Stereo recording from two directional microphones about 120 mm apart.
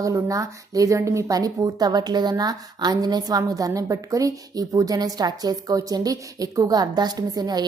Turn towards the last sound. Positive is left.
turn(degrees=-35)  # may be behind; listen again after turning